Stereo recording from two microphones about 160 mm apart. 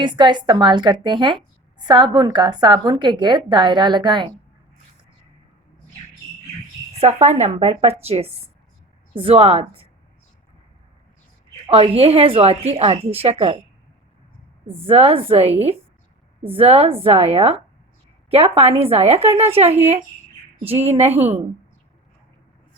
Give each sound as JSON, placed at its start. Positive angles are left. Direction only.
{"t": 0.0, "sound": "speech", "side_deg": -30}
{"t": 7.0, "sound": "a woman's voice", "side_deg": -45}
{"t": 11.7, "sound": "a woman's voice", "side_deg": -35}
{"t": 14.7, "sound": "a woman's voice", "side_deg": -35}